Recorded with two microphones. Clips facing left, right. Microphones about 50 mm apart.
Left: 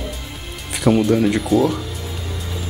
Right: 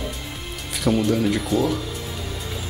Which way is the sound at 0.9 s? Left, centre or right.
Left.